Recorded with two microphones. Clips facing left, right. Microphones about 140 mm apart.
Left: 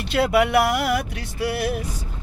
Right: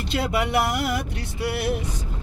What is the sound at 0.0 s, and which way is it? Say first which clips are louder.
Speech: left 5 dB; 65° left (ahead or behind).